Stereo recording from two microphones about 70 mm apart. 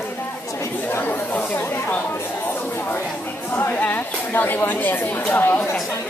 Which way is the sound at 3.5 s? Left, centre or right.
Left.